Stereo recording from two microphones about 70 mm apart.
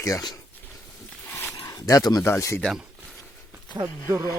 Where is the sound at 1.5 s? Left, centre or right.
Left.